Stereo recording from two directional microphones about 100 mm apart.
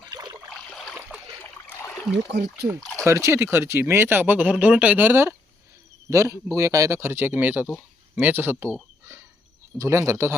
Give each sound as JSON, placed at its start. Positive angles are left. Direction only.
{"t": 0.0, "sound": "a sound", "side_deg": -45}
{"t": 0.5, "sound": "stream", "side_deg": 0}
{"t": 1.4, "sound": "boat", "side_deg": 20}
{"t": 3.0, "sound": "speech", "side_deg": -30}
{"t": 9.7, "sound": "speech", "side_deg": -30}